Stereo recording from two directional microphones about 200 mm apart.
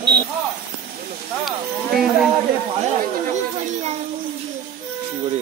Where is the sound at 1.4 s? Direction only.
Centre (ahead or behind).